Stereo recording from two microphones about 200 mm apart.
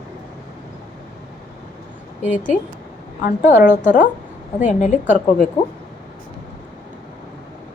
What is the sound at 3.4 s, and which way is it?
A woman's voice, 40° left (ahead or behind).